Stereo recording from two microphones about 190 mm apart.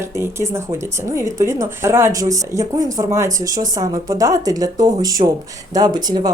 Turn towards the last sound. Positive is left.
turn(degrees=-20)  # may be behind; listen again after turning